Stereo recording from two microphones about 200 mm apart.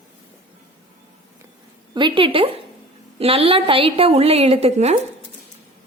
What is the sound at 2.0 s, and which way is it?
A woman's voice, 25° right (ahead or behind).